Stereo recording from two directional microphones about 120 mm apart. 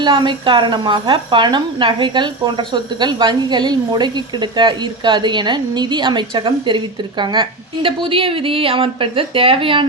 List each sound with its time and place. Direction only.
0.0 s speech: 40° right (ahead or behind)